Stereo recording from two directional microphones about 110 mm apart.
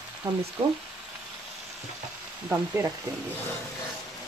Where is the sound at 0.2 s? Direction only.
30° right (ahead or behind).